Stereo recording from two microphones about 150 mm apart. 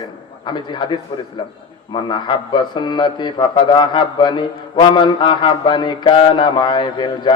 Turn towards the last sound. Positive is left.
turn(degrees=30)  # may be behind; listen again after turning